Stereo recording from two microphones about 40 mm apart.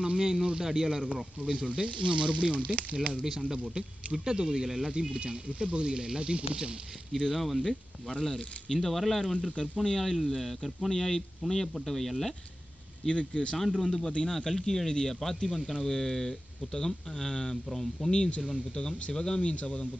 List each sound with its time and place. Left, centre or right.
0.0 s speech: centre
1.4 s speech: right
3.3 s speech: centre
5.1 s speech: right
7.2 s speech: centre
7.6 s speech: centre
8.7 s speech: centre
13.1 s speech: left
13.6 s speech: centre
19.1 s speech: centre
19.5 s speech: left